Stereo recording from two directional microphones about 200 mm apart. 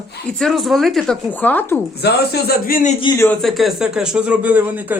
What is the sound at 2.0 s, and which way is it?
Speech, 55° left (ahead or behind).